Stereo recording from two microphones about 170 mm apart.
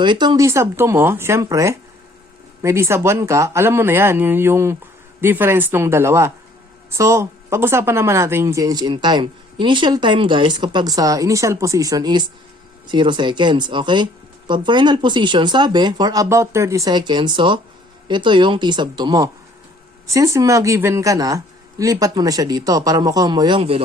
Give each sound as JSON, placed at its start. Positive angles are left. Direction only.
{"t": 0.0, "sound": "speech", "side_deg": -25}